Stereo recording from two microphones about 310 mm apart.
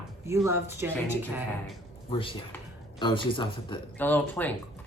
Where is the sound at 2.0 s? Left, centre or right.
Centre.